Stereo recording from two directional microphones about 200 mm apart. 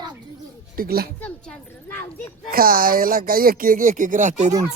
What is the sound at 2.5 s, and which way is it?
Speech, 45° right (ahead or behind).